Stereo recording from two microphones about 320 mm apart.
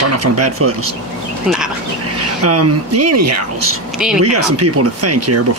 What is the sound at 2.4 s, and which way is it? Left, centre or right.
Speech, right.